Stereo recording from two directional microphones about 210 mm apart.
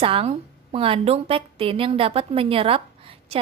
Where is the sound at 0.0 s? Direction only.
25° right (ahead or behind).